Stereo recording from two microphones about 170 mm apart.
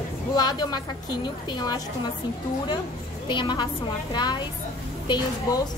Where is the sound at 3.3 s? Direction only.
25° left (ahead or behind).